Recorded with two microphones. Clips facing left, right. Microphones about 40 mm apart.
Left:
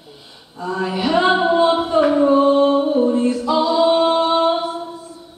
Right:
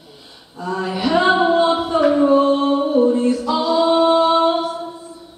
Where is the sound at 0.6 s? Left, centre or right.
Centre.